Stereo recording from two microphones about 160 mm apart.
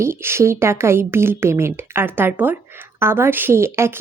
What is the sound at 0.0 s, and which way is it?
A woman's voice, 15° right (ahead or behind).